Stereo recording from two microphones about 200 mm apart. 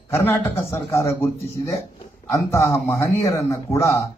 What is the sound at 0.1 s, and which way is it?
Speech, 10° left (ahead or behind).